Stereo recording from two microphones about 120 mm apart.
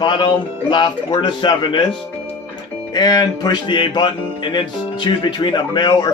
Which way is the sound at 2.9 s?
35° left (ahead or behind).